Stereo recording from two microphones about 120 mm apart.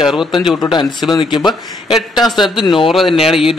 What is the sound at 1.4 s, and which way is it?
Speech, centre (ahead or behind).